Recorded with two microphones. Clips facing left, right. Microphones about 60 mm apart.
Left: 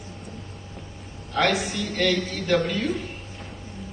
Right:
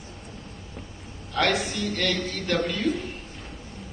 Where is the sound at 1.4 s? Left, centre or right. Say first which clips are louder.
Left 1 dB; centre.